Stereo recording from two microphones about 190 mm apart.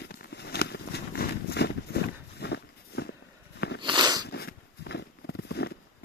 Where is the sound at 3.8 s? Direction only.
25° right (ahead or behind).